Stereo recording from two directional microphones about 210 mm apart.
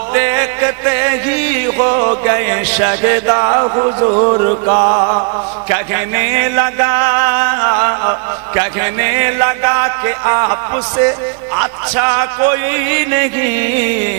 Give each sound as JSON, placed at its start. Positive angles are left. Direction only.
{"t": 0.1, "sound": "music", "side_deg": -15}